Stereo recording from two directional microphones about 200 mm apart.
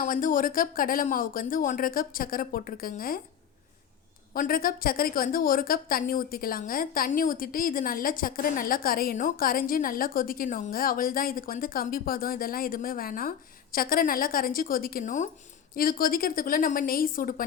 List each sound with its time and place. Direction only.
0.0 s speech: 40° left (ahead or behind)
4.4 s speech: 45° left (ahead or behind)